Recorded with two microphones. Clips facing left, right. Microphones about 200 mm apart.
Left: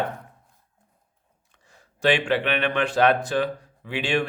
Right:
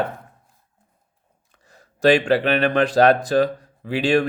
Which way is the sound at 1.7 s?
40° right (ahead or behind).